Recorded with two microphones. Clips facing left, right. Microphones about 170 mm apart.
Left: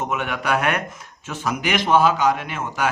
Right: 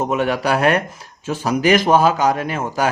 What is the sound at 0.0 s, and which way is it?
Speech, 35° right (ahead or behind).